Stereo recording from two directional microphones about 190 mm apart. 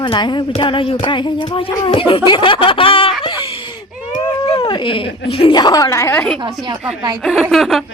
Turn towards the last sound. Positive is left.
turn(degrees=0)  # may be behind; listen again after turning